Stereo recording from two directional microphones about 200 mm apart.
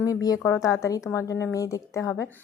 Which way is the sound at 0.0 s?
20° left (ahead or behind).